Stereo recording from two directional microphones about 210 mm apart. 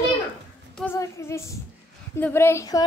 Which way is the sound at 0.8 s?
10° left (ahead or behind).